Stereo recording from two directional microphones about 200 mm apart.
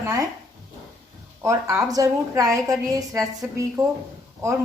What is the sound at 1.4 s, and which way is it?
A woman's voice, 15° right (ahead or behind).